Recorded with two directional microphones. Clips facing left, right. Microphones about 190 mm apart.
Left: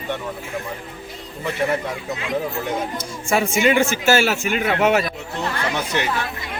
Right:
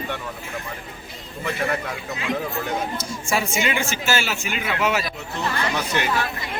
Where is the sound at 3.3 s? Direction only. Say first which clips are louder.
Left 6 dB; 45° left (ahead or behind).